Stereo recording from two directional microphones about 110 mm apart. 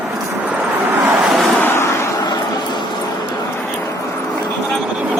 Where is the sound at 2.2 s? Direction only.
40° left (ahead or behind).